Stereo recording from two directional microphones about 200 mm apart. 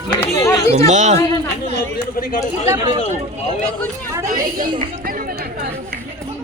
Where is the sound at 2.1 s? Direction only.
45° left (ahead or behind).